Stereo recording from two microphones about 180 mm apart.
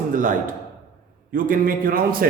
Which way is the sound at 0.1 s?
45° right (ahead or behind).